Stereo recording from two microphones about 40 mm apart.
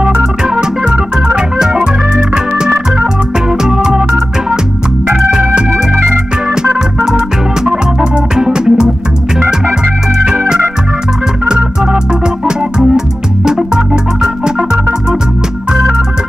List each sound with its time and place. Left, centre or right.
0.0 s organ: centre
10.1 s organ: centre
11.4 s organ: centre